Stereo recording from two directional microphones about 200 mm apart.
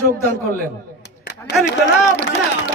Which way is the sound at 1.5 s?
Centre (ahead or behind).